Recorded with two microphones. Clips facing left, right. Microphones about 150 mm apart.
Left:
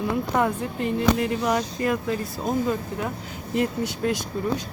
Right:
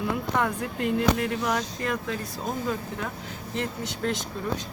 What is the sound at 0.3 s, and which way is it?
Speech, 5° left (ahead or behind).